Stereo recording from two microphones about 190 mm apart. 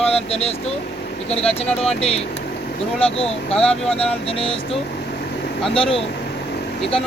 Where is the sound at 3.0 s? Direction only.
30° left (ahead or behind).